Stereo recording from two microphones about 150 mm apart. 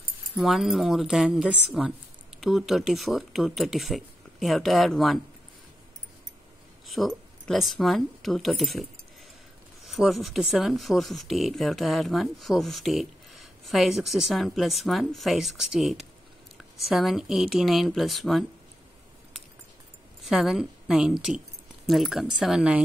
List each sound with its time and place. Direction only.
0.4 s speech: centre (ahead or behind)
6.9 s speech: centre (ahead or behind)
9.8 s speech: centre (ahead or behind)
20.2 s speech: centre (ahead or behind)